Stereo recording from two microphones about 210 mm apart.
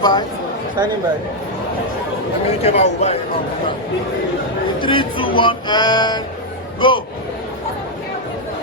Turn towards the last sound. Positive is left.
turn(degrees=25)  # may be behind; listen again after turning